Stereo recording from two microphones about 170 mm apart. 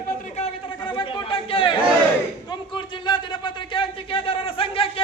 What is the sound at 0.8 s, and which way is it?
Chatter, 30° left (ahead or behind).